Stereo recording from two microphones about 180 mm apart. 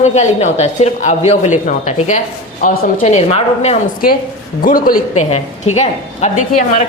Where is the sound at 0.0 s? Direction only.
40° left (ahead or behind).